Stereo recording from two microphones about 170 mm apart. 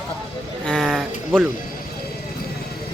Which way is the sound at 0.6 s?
Centre (ahead or behind).